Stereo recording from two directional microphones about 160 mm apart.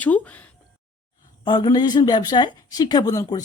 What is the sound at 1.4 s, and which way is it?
A woman's voice, 30° left (ahead or behind).